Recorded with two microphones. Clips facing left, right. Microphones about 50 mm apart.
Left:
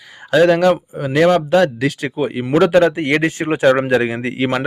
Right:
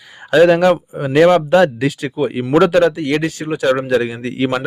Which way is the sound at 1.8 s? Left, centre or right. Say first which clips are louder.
Right 1 dB; centre.